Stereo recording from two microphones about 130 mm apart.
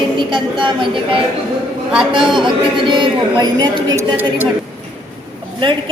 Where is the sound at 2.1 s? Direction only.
40° right (ahead or behind).